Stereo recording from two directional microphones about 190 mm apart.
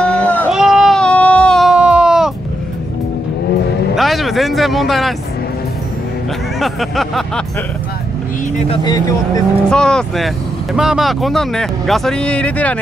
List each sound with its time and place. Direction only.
0.0 s a sound: 5° left (ahead or behind)
0.5 s baby cry: 5° right (ahead or behind)
3.9 s a sound: centre (ahead or behind)
6.6 s speech: centre (ahead or behind)
8.6 s speech: 20° left (ahead or behind)
9.7 s speech: 5° left (ahead or behind)